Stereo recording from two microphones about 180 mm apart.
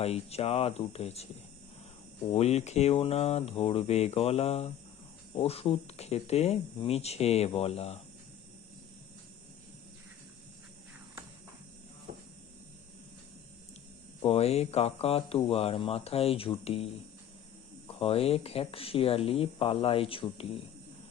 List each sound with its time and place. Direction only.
0.0 s speech: 35° left (ahead or behind)
2.3 s speech: 35° left (ahead or behind)
14.3 s speech: 35° left (ahead or behind)